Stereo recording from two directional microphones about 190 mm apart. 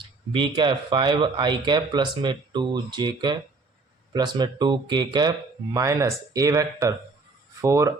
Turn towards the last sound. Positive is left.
turn(degrees=-15)  # may be behind; listen again after turning